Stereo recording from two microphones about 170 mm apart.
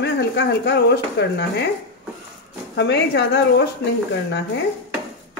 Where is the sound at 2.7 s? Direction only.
90° left.